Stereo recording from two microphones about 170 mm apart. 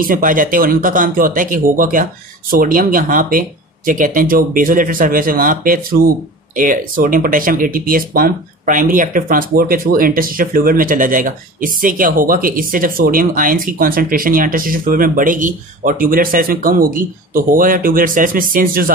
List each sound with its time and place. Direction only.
0.0 s speech: 55° right (ahead or behind)